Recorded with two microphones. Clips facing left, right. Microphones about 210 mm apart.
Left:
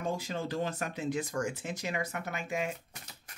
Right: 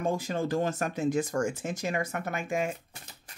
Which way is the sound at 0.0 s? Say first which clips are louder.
Right 5 dB; 50° right (ahead or behind).